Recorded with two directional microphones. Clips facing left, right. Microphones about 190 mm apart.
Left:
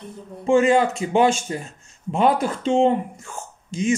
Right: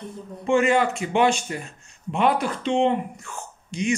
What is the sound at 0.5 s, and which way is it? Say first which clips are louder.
Speech: left 3 dB; 30° left (ahead or behind).